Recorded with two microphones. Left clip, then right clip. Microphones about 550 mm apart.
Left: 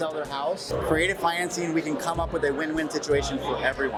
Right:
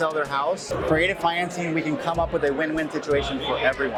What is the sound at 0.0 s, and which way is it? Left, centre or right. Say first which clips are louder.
Speech: right 5 dB; centre.